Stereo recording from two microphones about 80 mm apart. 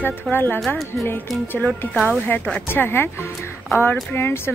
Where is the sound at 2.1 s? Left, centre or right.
Left.